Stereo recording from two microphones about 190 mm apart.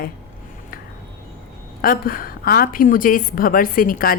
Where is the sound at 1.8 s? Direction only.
50° left (ahead or behind).